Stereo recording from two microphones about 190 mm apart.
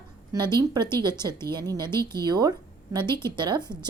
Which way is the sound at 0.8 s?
15° left (ahead or behind).